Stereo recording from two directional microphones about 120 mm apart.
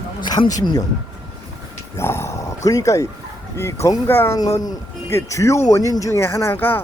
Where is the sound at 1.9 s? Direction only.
20° left (ahead or behind).